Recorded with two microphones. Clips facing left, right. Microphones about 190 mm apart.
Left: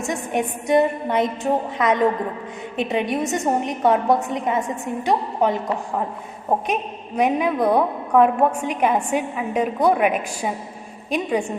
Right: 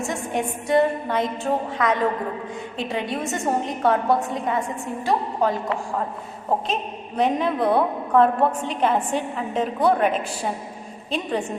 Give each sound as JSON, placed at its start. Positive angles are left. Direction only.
{"t": 0.1, "sound": "a woman's voice", "side_deg": 20}
{"t": 7.2, "sound": "a woman's voice", "side_deg": 10}